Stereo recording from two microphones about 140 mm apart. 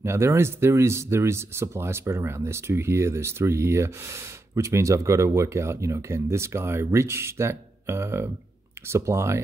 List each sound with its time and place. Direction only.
0.0 s speech: 20° right (ahead or behind)